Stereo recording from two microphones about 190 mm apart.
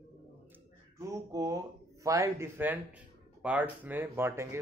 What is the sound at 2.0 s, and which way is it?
Speech, 15° right (ahead or behind).